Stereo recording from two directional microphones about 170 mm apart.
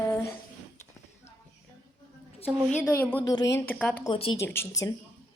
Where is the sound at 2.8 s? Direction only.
10° left (ahead or behind).